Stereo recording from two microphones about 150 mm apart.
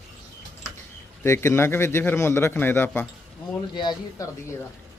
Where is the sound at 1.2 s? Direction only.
20° left (ahead or behind).